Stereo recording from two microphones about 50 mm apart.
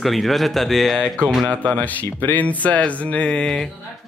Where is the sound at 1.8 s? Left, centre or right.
Left.